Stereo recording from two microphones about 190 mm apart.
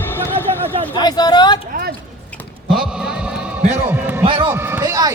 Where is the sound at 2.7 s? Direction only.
Centre (ahead or behind).